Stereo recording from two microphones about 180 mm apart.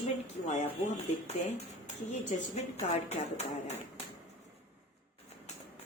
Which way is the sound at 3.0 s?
35° left (ahead or behind).